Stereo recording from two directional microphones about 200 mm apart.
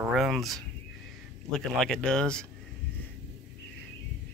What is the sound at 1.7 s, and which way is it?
Speech, 5° left (ahead or behind).